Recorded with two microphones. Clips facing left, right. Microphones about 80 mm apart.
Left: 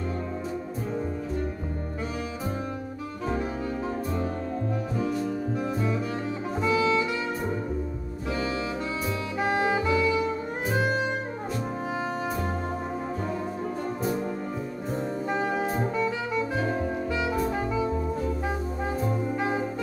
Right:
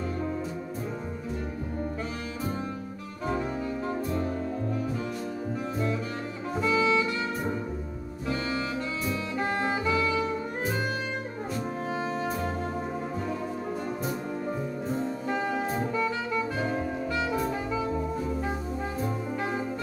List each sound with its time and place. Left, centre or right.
3.3 s music: centre
6.6 s music: centre
15.2 s music: centre
17.1 s music: centre